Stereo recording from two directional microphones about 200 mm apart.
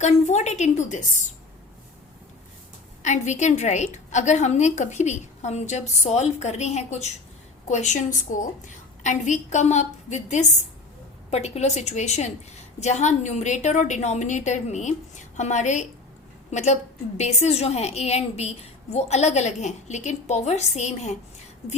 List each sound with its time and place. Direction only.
0.0 s a woman's voice: 35° left (ahead or behind)
3.0 s a woman's voice: 35° left (ahead or behind)